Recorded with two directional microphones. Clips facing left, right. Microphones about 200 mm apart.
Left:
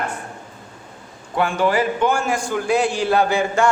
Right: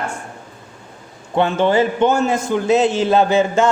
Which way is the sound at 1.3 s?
25° right (ahead or behind).